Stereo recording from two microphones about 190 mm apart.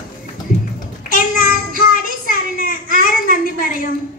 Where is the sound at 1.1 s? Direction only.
50° left (ahead or behind).